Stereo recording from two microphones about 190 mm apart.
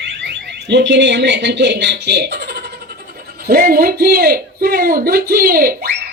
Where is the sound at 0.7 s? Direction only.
70° right (ahead or behind); by 5.9 s 50° right (ahead or behind).